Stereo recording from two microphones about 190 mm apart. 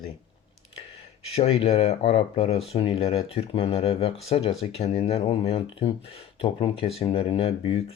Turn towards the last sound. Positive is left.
turn(degrees=30)  # may be behind; listen again after turning